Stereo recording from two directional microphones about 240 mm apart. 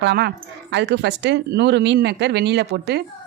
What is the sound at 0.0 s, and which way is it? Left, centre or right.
Speech, right.